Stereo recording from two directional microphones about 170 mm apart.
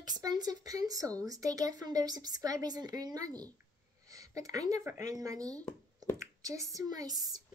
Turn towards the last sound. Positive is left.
turn(degrees=-20)  # may be behind; listen again after turning